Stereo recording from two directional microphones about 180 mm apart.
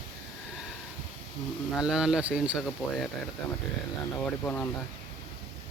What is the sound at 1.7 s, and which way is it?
Speech, 5° right (ahead or behind).